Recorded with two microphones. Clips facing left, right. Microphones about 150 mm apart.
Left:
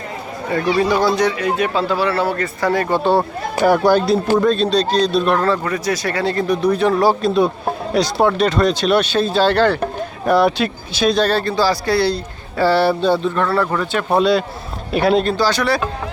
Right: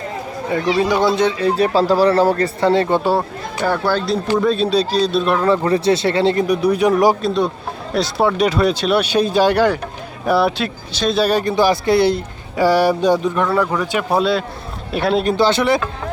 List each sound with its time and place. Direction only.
0.5 s speech: 15° right (ahead or behind)
3.0 s speech: 5° right (ahead or behind)
3.6 s speech: 15° left (ahead or behind)
4.4 s speech: 5° right (ahead or behind)
5.6 s speech: 30° right (ahead or behind)
6.5 s speech: 10° right (ahead or behind)
7.2 s speech: 5° left (ahead or behind); by 9.7 s 15° right (ahead or behind)
10.2 s speech: centre (ahead or behind)
14.1 s speech: centre (ahead or behind)
15.2 s speech: 20° right (ahead or behind)